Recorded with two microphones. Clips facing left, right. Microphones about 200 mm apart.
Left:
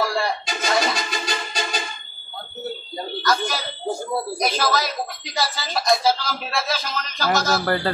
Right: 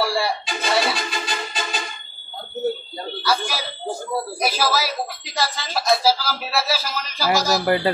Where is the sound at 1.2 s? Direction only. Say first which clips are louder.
Left 1 dB; 40° left (ahead or behind).